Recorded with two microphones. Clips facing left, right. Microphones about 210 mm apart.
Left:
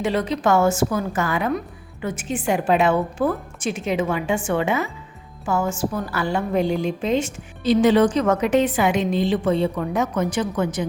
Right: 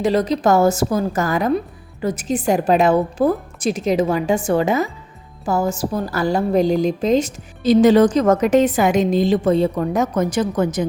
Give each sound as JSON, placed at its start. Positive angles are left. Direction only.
{"t": 0.0, "sound": "a woman's voice", "side_deg": -40}